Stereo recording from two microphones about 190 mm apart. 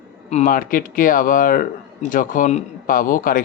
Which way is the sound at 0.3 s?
40° left (ahead or behind).